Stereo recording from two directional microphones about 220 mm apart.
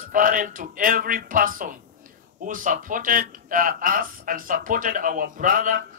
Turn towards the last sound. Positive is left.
turn(degrees=-35)  # may be behind; listen again after turning